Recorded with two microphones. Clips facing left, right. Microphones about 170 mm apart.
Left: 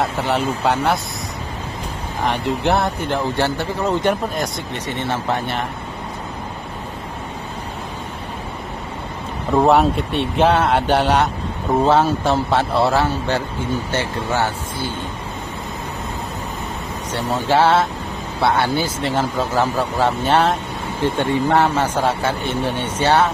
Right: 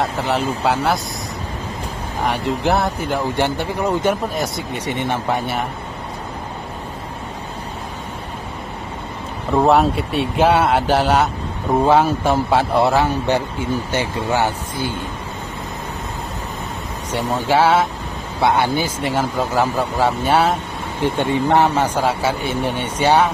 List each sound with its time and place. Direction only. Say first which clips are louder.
0.0 s speech: even; centre (ahead or behind)
2.2 s speech: even; centre (ahead or behind)
3.3 s speech: right 1 dB; 15° right (ahead or behind)
4.8 s speech: right 1 dB; 15° right (ahead or behind)
9.5 s speech: even; centre (ahead or behind); by 15.0 s 15° right (ahead or behind)
17.1 s speech: right 1 dB; 10° right (ahead or behind)